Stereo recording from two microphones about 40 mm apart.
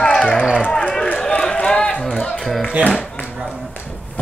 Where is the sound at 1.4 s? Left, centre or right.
Left.